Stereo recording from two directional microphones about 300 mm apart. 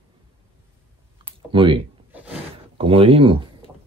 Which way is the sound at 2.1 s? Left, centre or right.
Centre.